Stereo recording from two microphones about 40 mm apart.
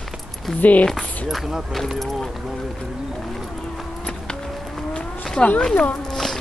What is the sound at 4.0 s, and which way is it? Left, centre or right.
Music, left.